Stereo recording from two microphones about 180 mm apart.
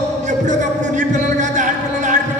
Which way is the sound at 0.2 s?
40° right (ahead or behind).